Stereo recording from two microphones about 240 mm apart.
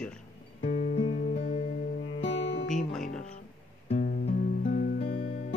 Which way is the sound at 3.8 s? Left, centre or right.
Left.